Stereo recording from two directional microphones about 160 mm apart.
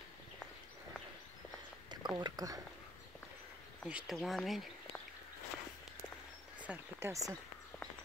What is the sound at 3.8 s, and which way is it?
Speech, 5° right (ahead or behind).